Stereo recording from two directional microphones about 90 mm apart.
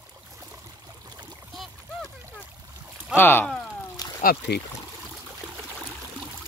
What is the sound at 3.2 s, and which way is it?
Speech, 25° left (ahead or behind).